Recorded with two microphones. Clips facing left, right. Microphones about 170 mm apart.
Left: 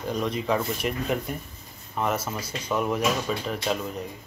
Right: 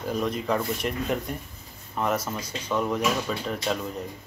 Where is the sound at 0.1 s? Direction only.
Centre (ahead or behind).